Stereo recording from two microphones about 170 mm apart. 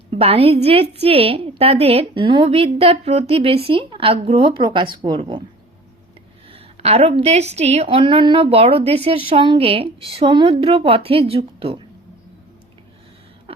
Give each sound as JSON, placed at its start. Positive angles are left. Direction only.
{"t": 0.1, "sound": "a woman's voice", "side_deg": -35}
{"t": 6.5, "sound": "a woman's voice", "side_deg": -35}